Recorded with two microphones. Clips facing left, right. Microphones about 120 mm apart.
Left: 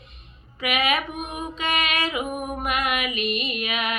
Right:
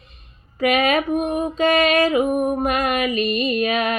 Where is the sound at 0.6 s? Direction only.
40° right (ahead or behind).